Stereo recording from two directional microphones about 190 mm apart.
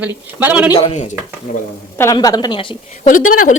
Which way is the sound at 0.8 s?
35° left (ahead or behind).